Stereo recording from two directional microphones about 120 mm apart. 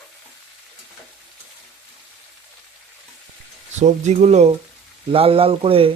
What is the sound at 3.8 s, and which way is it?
Speech, 75° right (ahead or behind).